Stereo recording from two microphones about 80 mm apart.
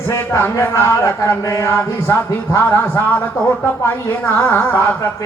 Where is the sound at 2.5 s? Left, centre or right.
Left.